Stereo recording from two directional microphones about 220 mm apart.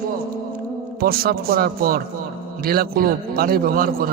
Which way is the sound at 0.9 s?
45° right (ahead or behind).